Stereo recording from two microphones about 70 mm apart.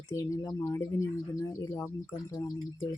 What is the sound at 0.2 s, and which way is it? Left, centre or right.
Speech, left.